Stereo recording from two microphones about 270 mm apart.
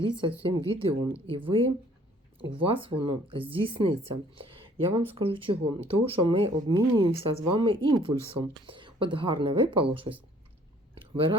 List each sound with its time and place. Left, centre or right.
0.0 s speech: centre